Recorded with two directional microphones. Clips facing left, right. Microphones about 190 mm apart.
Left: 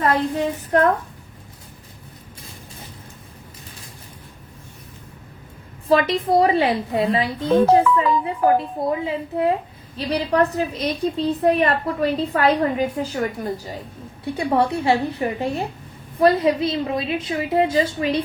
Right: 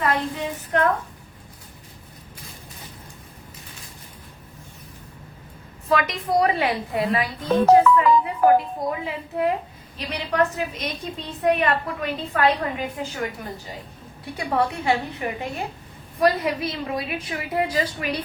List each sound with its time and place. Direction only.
0.7 s a woman's voice: 35° left (ahead or behind)
5.9 s a woman's voice: 30° left (ahead or behind)